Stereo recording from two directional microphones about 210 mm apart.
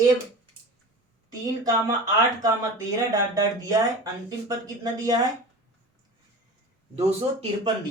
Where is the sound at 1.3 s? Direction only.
20° right (ahead or behind).